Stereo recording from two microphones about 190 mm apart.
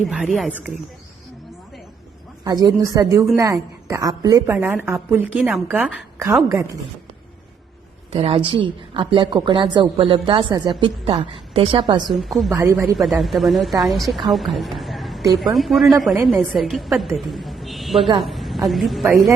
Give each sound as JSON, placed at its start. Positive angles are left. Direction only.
{"t": 0.1, "sound": "a woman's voice", "side_deg": 0}
{"t": 2.4, "sound": "a woman's voice", "side_deg": -20}
{"t": 8.1, "sound": "speech", "side_deg": -30}
{"t": 12.0, "sound": "a woman's voice", "side_deg": 0}